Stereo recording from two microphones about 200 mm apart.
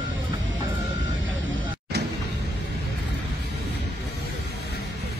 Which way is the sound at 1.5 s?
55° right (ahead or behind).